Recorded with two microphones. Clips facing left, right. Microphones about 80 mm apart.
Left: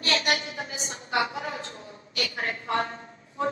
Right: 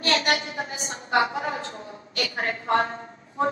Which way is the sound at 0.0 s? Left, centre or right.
Right.